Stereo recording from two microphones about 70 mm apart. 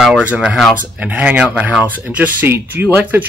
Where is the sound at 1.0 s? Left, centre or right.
Right.